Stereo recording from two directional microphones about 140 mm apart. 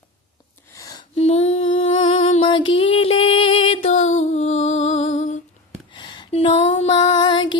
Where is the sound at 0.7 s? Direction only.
25° left (ahead or behind).